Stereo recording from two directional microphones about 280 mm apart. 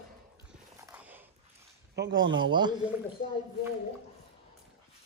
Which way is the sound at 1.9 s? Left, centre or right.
Right.